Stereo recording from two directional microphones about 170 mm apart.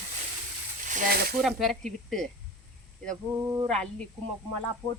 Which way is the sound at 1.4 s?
Centre (ahead or behind).